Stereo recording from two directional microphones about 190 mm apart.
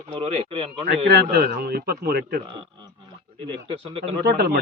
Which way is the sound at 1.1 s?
60° right (ahead or behind).